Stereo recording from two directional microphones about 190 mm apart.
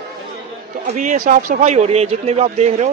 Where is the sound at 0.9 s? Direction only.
40° right (ahead or behind).